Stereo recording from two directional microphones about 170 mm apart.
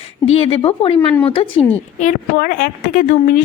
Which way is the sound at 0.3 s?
35° left (ahead or behind).